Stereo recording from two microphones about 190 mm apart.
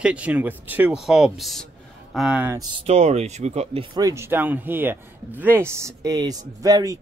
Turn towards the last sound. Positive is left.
turn(degrees=-20)  # may be behind; listen again after turning